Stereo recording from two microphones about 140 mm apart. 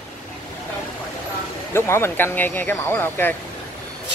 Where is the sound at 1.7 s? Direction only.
15° left (ahead or behind).